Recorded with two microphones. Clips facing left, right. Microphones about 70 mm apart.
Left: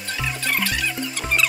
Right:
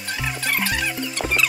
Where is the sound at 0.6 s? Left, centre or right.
Right.